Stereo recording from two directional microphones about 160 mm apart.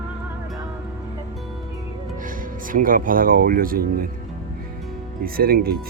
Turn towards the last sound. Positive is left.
turn(degrees=-70)  # may be behind; listen again after turning